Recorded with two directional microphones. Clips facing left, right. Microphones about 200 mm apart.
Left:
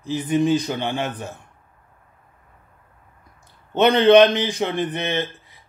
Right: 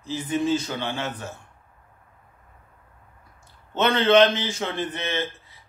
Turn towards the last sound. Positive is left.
turn(degrees=15)  # may be behind; listen again after turning